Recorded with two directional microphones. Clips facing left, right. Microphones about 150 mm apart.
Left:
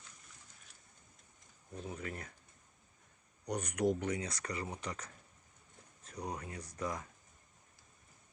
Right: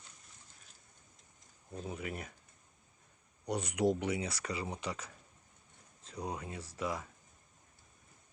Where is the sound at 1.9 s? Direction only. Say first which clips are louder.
Right 3 dB; 15° right (ahead or behind).